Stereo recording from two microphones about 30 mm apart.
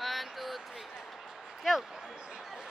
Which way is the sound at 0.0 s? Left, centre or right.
Centre.